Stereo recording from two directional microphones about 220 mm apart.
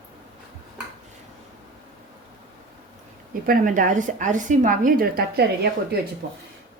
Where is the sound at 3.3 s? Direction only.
40° right (ahead or behind).